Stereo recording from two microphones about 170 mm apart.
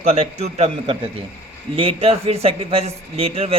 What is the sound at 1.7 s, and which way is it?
Speech, 35° right (ahead or behind).